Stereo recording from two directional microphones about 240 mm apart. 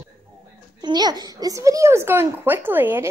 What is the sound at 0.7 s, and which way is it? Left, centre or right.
Speech, centre.